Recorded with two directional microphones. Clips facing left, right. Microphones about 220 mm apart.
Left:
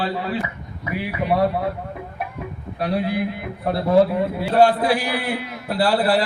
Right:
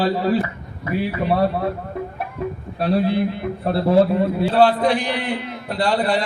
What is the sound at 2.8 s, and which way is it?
Speech, 25° right (ahead or behind).